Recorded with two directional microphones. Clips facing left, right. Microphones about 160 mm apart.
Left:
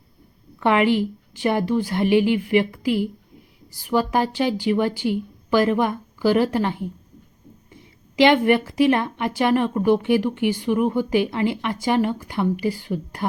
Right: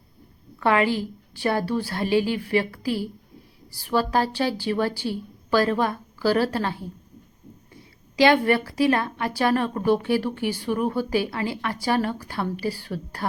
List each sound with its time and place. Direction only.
0.6 s a woman's voice: 20° left (ahead or behind)